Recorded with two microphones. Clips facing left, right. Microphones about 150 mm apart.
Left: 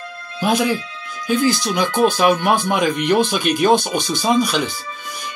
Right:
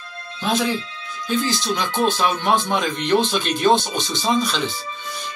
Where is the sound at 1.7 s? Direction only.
55° left (ahead or behind).